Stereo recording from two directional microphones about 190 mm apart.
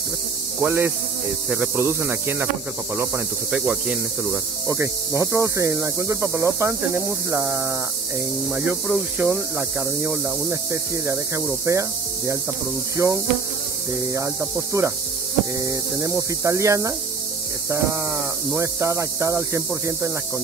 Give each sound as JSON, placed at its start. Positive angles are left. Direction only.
{"t": 0.6, "sound": "speech", "side_deg": -10}
{"t": 4.6, "sound": "speech", "side_deg": -15}
{"t": 12.9, "sound": "speech", "side_deg": -15}